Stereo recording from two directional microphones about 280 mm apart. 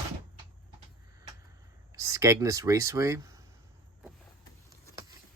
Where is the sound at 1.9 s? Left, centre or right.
Centre.